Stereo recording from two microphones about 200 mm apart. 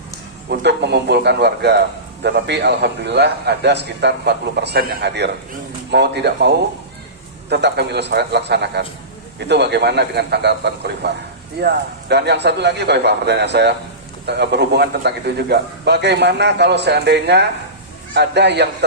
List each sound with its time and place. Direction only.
0.5 s a man's voice: 60° right (ahead or behind)
7.5 s a man's voice: 55° right (ahead or behind)